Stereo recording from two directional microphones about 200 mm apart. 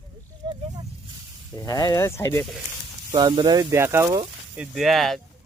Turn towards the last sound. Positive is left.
turn(degrees=0)  # may be behind; listen again after turning